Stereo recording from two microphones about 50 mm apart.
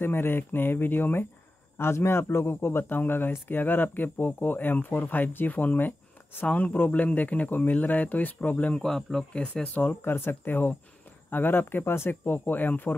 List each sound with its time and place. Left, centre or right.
0.0 s speech: left
1.8 s speech: left
2.8 s speech: left
8.7 s speech: centre
9.3 s speech: left
10.0 s speech: left